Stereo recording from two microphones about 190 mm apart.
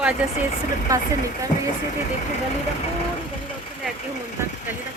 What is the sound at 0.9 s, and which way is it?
Speech, 20° right (ahead or behind).